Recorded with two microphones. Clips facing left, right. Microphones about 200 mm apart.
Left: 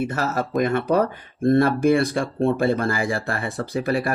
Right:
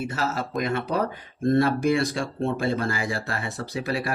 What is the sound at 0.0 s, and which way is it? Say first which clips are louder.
Speech: left 4 dB; 55° left (ahead or behind).